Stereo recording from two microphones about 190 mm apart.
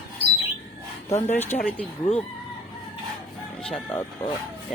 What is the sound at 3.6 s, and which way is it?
Filing, 5° left (ahead or behind).